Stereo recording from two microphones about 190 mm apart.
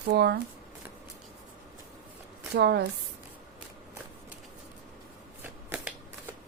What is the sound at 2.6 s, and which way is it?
Speech, 60° right (ahead or behind).